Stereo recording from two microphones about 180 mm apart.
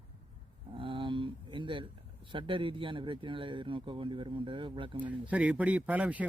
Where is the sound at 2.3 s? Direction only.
25° right (ahead or behind).